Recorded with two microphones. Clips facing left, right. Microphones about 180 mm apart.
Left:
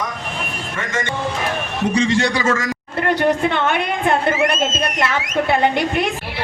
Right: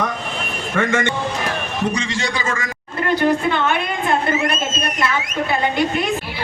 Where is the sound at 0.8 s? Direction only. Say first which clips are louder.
Right 7 dB; 60° right (ahead or behind).